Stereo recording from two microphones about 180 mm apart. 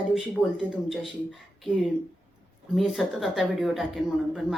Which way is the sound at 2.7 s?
Centre (ahead or behind).